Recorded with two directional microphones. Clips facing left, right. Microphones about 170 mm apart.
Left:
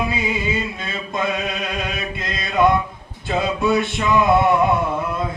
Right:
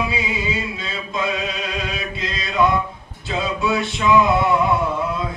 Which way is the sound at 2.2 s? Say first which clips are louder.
Left 1 dB; 55° left (ahead or behind).